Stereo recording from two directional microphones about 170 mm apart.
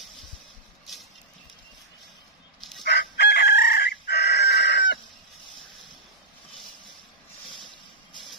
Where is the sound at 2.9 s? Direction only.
85° left.